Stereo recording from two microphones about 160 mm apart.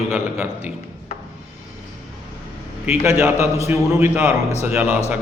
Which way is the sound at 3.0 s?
20° right (ahead or behind).